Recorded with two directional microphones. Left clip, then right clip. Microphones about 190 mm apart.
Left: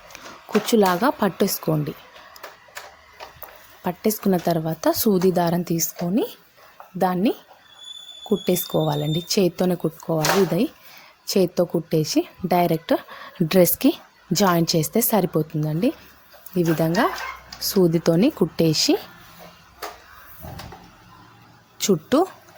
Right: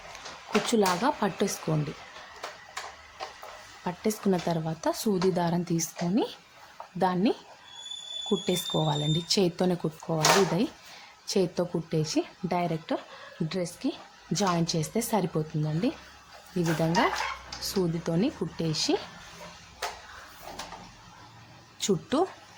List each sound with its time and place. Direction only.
0.7 s speech: 30° left (ahead or behind)
3.8 s a woman's voice: 30° left (ahead or behind)
21.8 s a woman's voice: 30° left (ahead or behind)